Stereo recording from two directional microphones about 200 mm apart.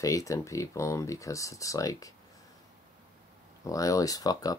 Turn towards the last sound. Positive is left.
turn(degrees=20)  # may be behind; listen again after turning